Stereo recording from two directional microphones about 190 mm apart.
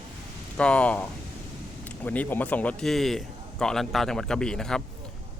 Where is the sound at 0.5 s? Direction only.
5° left (ahead or behind).